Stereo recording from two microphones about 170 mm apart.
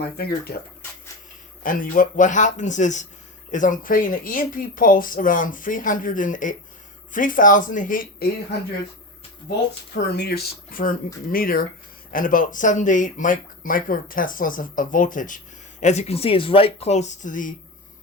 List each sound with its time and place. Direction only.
0.2 s speech: 65° left (ahead or behind)
1.6 s speech: 55° left (ahead or behind)
9.9 s speech: 80° left; by 17.5 s 50° left (ahead or behind)